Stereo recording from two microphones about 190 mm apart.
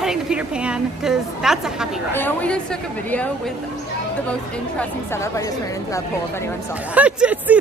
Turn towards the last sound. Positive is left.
turn(degrees=-5)  # may be behind; listen again after turning